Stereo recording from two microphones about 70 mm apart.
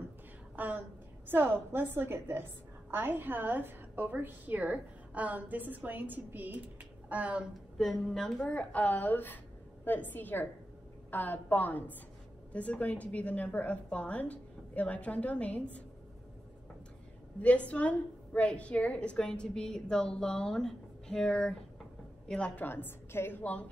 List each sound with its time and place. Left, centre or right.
0.6 s a woman's voice: right
7.7 s a woman's voice: centre
17.4 s a woman's voice: centre
22.7 s a woman's voice: left
23.4 s a woman's voice: centre